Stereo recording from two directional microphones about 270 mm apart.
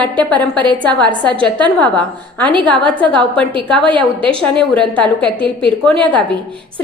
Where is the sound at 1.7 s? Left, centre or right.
Centre.